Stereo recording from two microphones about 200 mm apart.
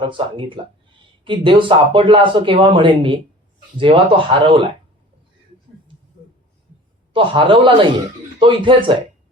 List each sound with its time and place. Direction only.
0.0 s speech: 25° right (ahead or behind)
7.1 s speech: 25° right (ahead or behind)